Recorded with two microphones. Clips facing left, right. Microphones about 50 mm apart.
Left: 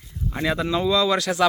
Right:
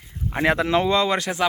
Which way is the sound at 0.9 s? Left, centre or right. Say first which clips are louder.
Even; right.